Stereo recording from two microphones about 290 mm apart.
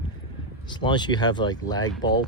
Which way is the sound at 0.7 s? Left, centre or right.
Centre.